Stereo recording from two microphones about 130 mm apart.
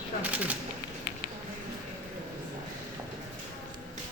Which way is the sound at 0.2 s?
10° right (ahead or behind).